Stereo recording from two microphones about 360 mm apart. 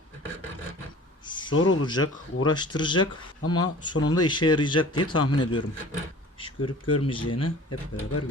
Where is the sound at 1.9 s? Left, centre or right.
Centre.